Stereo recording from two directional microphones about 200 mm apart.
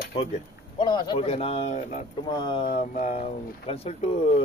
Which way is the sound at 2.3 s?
25° left (ahead or behind).